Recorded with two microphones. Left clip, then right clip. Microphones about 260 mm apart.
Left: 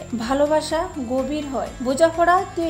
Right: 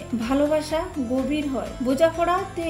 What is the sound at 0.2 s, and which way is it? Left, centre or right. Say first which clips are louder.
A woman's voice: left 3 dB; left.